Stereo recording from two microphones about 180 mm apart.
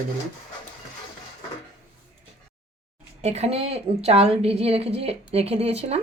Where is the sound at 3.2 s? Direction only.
35° right (ahead or behind).